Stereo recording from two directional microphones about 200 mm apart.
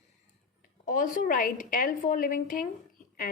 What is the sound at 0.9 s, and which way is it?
A woman's voice, 40° left (ahead or behind).